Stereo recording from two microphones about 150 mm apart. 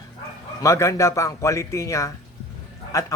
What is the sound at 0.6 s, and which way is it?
Speech, 20° left (ahead or behind).